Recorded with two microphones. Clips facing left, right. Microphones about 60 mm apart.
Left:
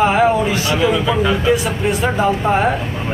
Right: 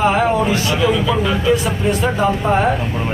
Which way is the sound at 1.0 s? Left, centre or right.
Centre.